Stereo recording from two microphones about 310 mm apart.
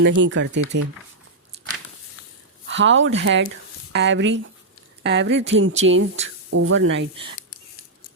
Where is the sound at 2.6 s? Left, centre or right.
Right.